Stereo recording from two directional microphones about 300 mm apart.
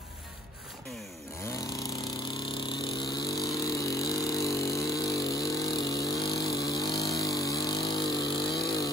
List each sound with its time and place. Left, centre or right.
2.4 s vehicle: centre
6.2 s vehicle: left
6.5 s vehicle: centre